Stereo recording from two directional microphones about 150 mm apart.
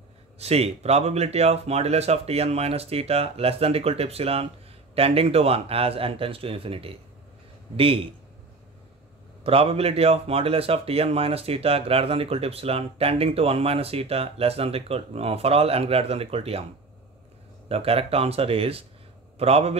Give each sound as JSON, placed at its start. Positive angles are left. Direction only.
{"t": 0.4, "sound": "speech", "side_deg": -45}
{"t": 9.4, "sound": "speech", "side_deg": -40}
{"t": 17.6, "sound": "speech", "side_deg": -40}